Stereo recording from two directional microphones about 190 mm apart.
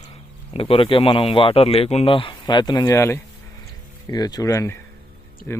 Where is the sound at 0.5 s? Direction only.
30° left (ahead or behind).